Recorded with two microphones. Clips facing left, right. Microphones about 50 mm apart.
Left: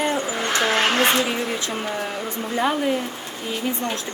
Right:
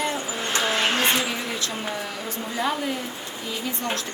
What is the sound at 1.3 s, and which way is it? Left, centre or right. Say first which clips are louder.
Speech: left 4 dB; left.